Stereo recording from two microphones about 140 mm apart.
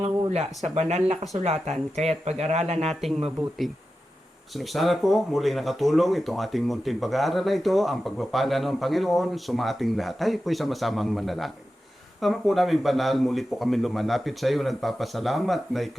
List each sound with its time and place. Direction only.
0.0 s speech: 50° right (ahead or behind)
2.9 s speech: centre (ahead or behind)
4.5 s speech: centre (ahead or behind)